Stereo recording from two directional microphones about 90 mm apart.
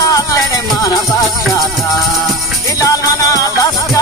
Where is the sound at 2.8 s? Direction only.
40° left (ahead or behind).